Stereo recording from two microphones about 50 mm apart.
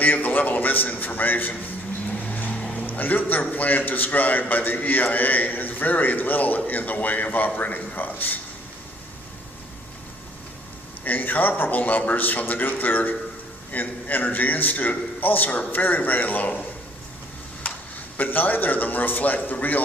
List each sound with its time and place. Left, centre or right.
0.0 s a man's voice: left
2.1 s vehicle: left
2.8 s a man's voice: left
11.0 s a man's voice: left
17.6 s a sound: left
18.2 s a man's voice: left